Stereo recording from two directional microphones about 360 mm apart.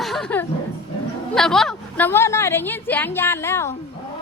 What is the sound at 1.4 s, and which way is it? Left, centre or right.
A woman's voice, centre.